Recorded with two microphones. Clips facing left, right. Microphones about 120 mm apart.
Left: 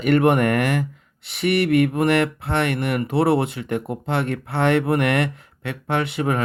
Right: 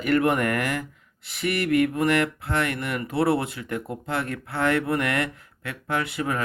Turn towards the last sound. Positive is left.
turn(degrees=25)  # may be behind; listen again after turning